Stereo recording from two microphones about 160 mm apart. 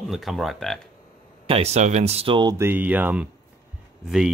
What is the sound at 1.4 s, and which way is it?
Speech, 40° right (ahead or behind).